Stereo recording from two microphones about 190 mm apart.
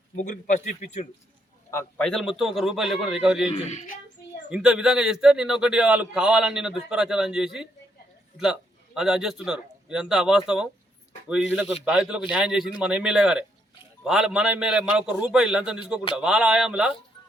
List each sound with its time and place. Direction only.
0.2 s speech: 40° left (ahead or behind)
2.0 s a man's voice: 5° left (ahead or behind)
3.5 s speech: 35° left (ahead or behind)
4.5 s a man's voice: 5° right (ahead or behind)
9.0 s a man's voice: 5° right (ahead or behind)